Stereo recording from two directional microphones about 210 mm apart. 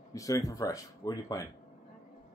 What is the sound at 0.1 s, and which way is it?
Speech, 15° left (ahead or behind).